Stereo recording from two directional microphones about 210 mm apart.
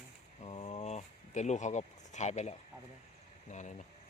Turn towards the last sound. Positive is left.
turn(degrees=35)  # may be behind; listen again after turning